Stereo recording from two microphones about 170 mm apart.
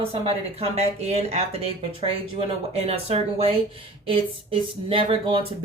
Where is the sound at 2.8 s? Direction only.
35° right (ahead or behind).